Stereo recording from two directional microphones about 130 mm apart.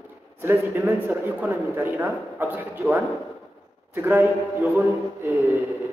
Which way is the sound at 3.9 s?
15° right (ahead or behind).